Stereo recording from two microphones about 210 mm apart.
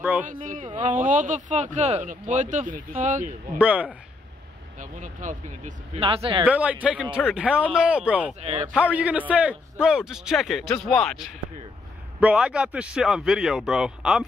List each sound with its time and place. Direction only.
0.0 s speech: 10° right (ahead or behind)
0.3 s speech: 40° right (ahead or behind)
3.5 s speech: 5° right (ahead or behind)
4.7 s speech: 35° right (ahead or behind)
6.0 s speech: 25° right (ahead or behind)
6.4 s a man's voice: 5° right (ahead or behind)
8.4 s speech: 30° right (ahead or behind)
8.7 s a man's voice: 5° right (ahead or behind)